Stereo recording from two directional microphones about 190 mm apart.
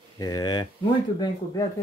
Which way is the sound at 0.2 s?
20° left (ahead or behind).